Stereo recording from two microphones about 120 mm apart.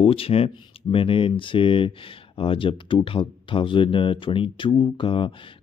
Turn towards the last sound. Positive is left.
turn(degrees=45)  # may be behind; listen again after turning